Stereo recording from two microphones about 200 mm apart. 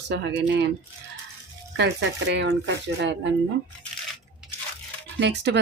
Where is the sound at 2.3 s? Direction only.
60° right (ahead or behind).